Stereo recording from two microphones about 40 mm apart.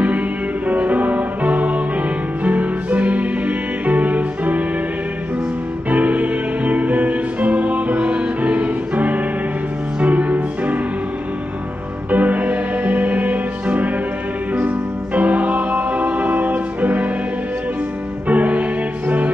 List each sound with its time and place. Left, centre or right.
0.7 s music: right
5.9 s music: right
12.1 s music: right
15.1 s music: right
18.3 s music: right